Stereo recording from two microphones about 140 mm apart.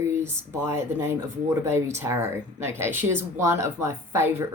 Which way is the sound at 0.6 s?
20° right (ahead or behind).